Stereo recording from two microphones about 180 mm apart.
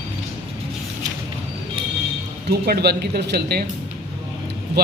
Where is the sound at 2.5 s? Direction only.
60° right (ahead or behind).